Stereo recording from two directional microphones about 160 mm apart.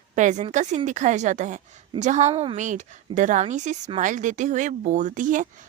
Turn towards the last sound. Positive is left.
turn(degrees=-55)  # may be behind; listen again after turning